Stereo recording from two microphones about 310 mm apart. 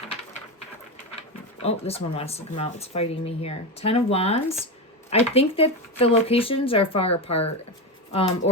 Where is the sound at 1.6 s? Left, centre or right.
Centre.